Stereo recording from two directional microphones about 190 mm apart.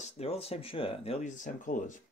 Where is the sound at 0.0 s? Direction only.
30° left (ahead or behind).